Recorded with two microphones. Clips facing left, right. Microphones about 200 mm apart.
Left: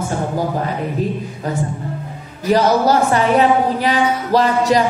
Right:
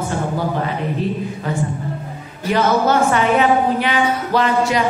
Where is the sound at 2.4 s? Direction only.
35° left (ahead or behind).